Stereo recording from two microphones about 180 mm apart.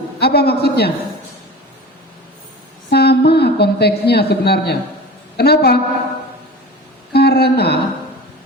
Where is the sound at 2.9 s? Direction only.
65° left (ahead or behind).